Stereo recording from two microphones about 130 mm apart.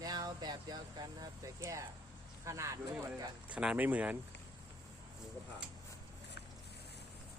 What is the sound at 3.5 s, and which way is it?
Speech, 10° right (ahead or behind).